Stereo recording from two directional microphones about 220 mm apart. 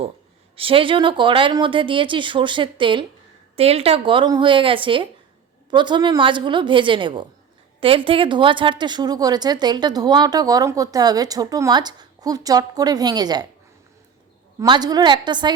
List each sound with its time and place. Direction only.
0.5 s a woman's voice: 25° right (ahead or behind)
14.6 s speech: 20° right (ahead or behind)